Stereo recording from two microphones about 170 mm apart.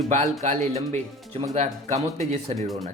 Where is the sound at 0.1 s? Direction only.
45° right (ahead or behind).